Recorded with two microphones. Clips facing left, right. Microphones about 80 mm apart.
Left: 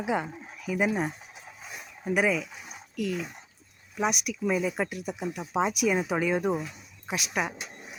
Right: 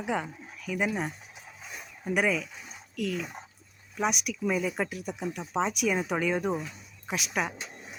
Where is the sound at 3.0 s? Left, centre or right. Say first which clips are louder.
Left 1 dB; centre.